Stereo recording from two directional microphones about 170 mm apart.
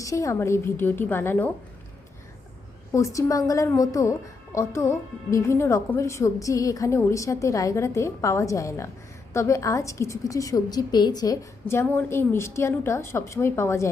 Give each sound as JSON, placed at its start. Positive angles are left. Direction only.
{"t": 0.0, "sound": "a woman's voice", "side_deg": 20}
{"t": 2.9, "sound": "a woman's voice", "side_deg": 20}